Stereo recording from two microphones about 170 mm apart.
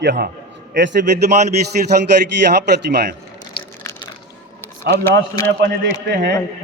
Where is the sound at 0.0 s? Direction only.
90° right.